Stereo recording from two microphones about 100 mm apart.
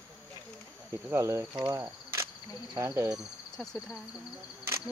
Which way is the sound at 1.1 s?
30° right (ahead or behind).